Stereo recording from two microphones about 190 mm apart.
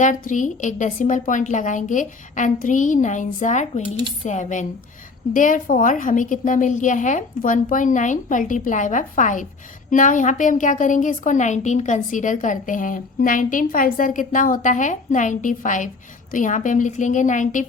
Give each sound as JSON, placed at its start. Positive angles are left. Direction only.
{"t": 0.0, "sound": "a woman's voice", "side_deg": 40}